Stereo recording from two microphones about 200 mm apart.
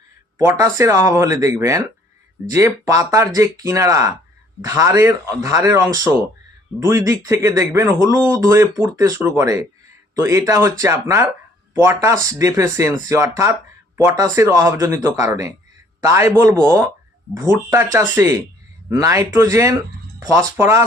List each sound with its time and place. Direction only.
0.3 s speech: 15° right (ahead or behind)